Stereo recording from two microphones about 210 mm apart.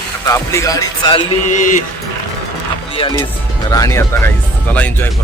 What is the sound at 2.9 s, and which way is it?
Speech, 25° left (ahead or behind).